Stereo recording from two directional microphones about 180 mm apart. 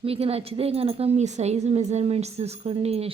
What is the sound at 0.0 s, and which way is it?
A woman's voice, 30° right (ahead or behind).